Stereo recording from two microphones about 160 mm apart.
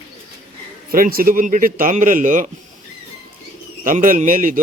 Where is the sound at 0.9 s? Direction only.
65° right (ahead or behind).